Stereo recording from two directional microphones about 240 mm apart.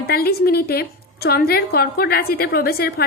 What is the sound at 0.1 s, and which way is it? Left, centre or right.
Speech, left.